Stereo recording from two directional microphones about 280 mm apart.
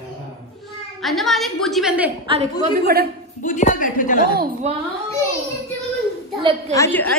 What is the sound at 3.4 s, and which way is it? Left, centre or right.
Speech, left.